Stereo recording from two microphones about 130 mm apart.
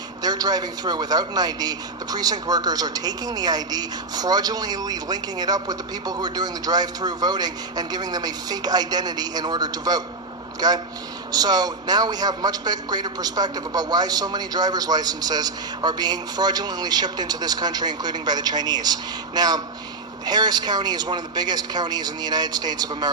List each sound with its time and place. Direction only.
0.2 s a man's voice: 30° right (ahead or behind)